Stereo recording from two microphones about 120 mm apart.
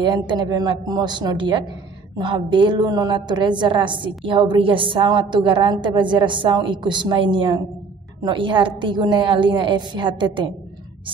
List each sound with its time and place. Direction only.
0.0 s a woman's voice: 40° right (ahead or behind)